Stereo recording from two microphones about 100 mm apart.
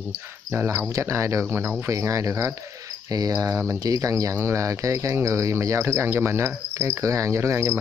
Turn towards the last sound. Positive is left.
turn(degrees=-25)  # may be behind; listen again after turning